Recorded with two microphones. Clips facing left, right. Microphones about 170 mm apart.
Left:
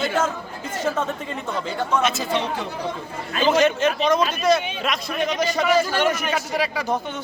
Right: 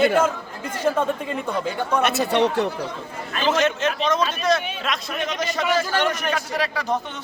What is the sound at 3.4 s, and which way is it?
A man's voice, centre (ahead or behind).